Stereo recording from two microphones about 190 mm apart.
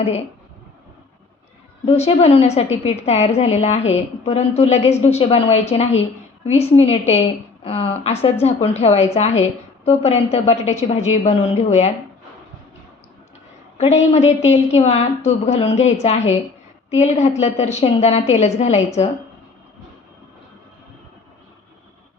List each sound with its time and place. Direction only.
0.0 s a woman's voice: 35° left (ahead or behind)
1.8 s a woman's voice: 35° left (ahead or behind)
13.7 s a woman's voice: 35° left (ahead or behind)